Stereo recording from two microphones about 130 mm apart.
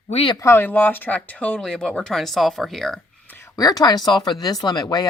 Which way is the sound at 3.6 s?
30° left (ahead or behind).